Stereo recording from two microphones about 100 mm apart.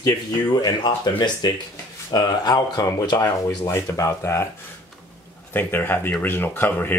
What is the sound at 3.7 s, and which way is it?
Speech, 30° left (ahead or behind).